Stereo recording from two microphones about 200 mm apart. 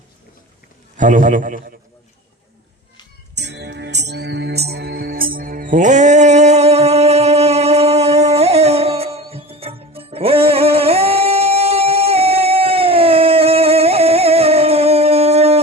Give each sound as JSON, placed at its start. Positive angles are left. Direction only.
{"t": 0.9, "sound": "a man's voice", "side_deg": -40}
{"t": 3.3, "sound": "music", "side_deg": -60}